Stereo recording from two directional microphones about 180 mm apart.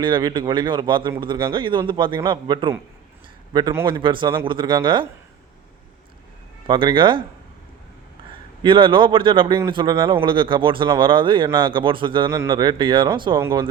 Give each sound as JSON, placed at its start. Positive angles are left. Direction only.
{"t": 0.0, "sound": "speech", "side_deg": -25}
{"t": 6.7, "sound": "speech", "side_deg": -25}
{"t": 8.6, "sound": "speech", "side_deg": -30}